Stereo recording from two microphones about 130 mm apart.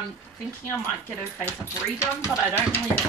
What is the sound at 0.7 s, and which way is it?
Speech, 15° left (ahead or behind).